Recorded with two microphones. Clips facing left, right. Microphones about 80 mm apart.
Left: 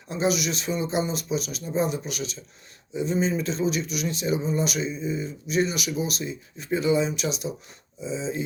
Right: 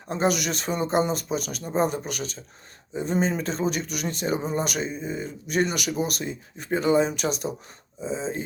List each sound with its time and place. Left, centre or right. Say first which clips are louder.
0.1 s speech: right 1 dB; right